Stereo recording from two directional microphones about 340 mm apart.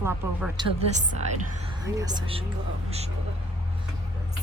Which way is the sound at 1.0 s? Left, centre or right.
Centre.